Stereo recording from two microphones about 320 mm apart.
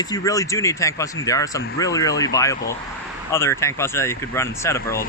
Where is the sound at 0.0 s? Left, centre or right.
Centre.